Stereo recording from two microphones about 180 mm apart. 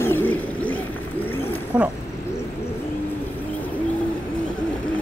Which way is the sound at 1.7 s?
5° right (ahead or behind).